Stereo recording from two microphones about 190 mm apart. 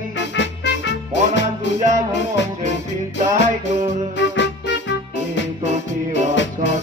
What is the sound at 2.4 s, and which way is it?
Music, 75° left (ahead or behind).